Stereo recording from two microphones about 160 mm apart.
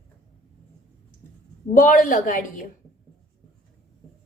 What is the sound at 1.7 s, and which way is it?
Speech, 55° left (ahead or behind).